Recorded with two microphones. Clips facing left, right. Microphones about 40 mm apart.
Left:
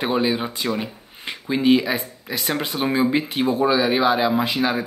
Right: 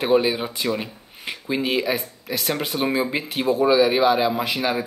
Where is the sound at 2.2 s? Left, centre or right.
Centre.